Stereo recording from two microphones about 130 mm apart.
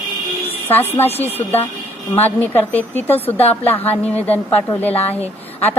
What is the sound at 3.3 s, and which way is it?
Speech, 50° left (ahead or behind).